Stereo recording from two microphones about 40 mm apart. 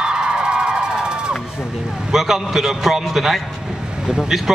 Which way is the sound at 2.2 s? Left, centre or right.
Centre.